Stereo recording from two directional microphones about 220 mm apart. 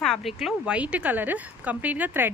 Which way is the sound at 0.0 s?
Centre (ahead or behind).